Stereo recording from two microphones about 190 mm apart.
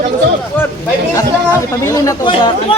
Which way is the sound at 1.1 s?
15° left (ahead or behind).